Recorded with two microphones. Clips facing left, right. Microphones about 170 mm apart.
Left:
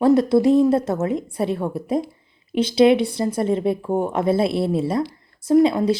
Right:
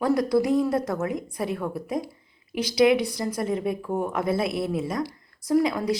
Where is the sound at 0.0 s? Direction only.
25° left (ahead or behind).